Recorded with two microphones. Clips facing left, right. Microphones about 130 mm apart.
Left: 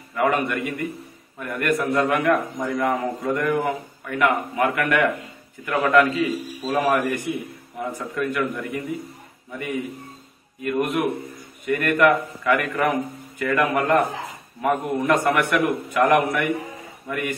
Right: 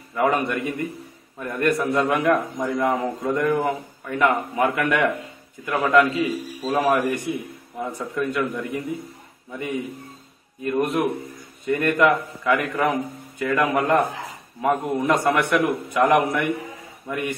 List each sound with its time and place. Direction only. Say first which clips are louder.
0.1 s a man's voice: even; 20° right (ahead or behind)
5.7 s a man's voice: left 1 dB; 5° right (ahead or behind)
5.9 s a man's voice: right 1 dB; 20° right (ahead or behind)
10.6 s a man's voice: right 1 dB; 30° right (ahead or behind)